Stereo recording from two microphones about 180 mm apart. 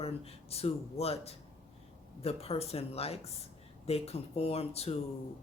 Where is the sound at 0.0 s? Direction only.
35° left (ahead or behind).